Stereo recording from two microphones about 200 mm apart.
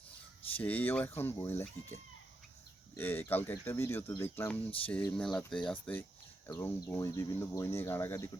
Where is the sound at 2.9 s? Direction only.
10° left (ahead or behind).